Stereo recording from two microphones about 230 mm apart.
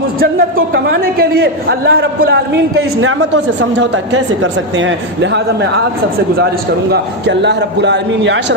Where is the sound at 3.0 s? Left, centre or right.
Right.